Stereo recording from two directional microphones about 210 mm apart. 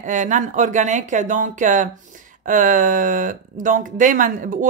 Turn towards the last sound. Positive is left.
turn(degrees=-40)  # may be behind; listen again after turning